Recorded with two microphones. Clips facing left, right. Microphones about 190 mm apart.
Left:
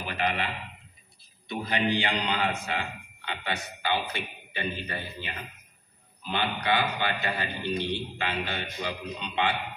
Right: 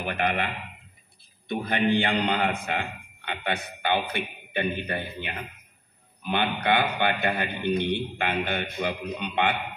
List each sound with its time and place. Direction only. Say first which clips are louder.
0.0 s a man's voice: right 3 dB; 55° right (ahead or behind)